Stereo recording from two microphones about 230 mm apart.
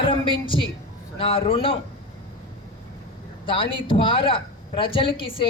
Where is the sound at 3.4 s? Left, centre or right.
Left.